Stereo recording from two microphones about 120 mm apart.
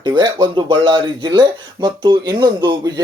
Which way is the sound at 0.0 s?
40° right (ahead or behind).